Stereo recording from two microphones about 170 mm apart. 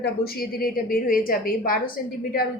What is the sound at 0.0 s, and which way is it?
A woman's voice, 65° left (ahead or behind).